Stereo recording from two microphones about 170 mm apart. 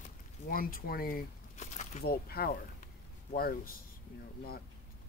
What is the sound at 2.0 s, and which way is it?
Speech, 65° left (ahead or behind).